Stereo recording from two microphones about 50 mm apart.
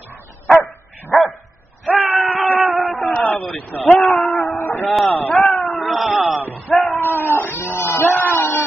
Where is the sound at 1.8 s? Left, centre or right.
Right.